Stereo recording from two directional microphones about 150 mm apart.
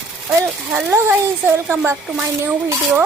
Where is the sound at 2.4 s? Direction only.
15° right (ahead or behind).